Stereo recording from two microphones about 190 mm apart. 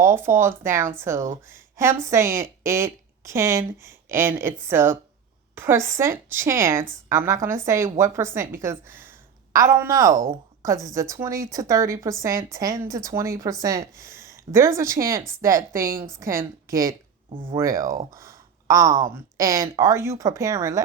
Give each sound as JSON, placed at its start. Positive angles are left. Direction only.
{"t": 0.0, "sound": "a woman's voice", "side_deg": -10}